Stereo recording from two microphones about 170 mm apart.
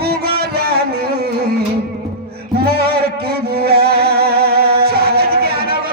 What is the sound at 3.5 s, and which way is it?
Music, 65° right (ahead or behind).